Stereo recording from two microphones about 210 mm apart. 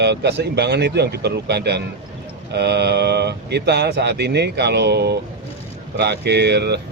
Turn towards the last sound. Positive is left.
turn(degrees=-55)  # may be behind; listen again after turning